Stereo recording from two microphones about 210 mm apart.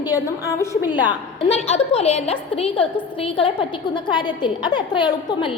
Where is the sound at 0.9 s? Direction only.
25° left (ahead or behind).